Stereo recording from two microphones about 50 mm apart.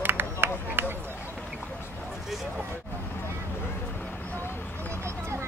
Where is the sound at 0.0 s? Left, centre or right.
Right.